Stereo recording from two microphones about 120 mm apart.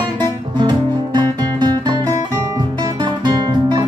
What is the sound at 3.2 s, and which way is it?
Music, 35° right (ahead or behind).